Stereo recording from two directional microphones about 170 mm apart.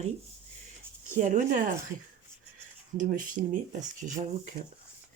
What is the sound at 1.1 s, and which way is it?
Speech, 45° right (ahead or behind).